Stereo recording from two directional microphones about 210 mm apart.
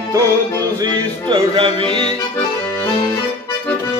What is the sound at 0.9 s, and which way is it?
Music, 20° right (ahead or behind).